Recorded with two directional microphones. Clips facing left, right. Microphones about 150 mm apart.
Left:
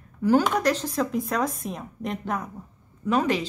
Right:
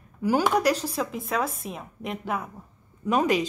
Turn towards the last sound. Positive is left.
turn(degrees=-15)  # may be behind; listen again after turning